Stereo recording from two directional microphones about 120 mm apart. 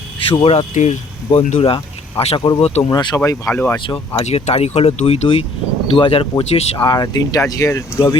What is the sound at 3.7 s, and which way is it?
Speech, 45° left (ahead or behind).